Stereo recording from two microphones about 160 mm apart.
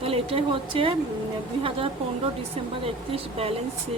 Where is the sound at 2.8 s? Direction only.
35° right (ahead or behind).